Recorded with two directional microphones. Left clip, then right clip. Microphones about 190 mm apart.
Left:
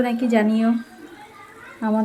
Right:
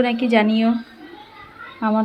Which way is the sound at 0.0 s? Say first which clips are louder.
Right 3 dB; 5° left (ahead or behind).